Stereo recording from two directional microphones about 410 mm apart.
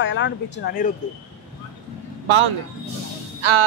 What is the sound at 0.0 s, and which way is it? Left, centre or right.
Speech, left.